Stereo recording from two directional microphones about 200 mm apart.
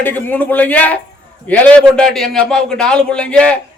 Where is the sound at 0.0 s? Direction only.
10° left (ahead or behind).